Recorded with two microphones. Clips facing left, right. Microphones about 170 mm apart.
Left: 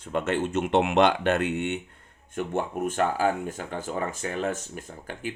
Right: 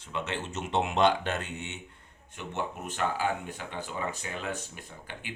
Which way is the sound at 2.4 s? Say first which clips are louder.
Left 8 dB; 50° left (ahead or behind).